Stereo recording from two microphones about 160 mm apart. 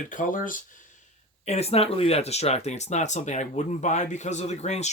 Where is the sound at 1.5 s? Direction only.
40° left (ahead or behind).